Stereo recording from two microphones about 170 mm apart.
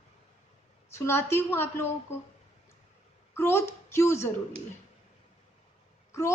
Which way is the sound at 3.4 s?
15° left (ahead or behind).